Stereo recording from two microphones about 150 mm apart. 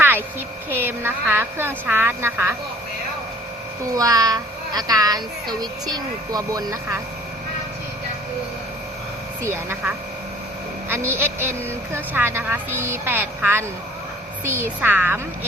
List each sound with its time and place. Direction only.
0.8 s speech: 15° right (ahead or behind)
3.9 s a child's voice: 25° right (ahead or behind)
9.4 s a woman's voice: 15° right (ahead or behind)